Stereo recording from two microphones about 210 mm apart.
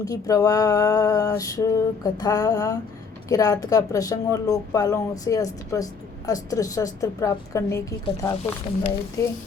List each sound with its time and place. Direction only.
0.0 s speech: 15° left (ahead or behind)